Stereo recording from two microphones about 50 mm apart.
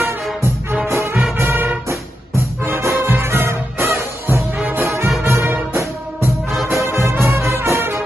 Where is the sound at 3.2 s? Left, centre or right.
Right.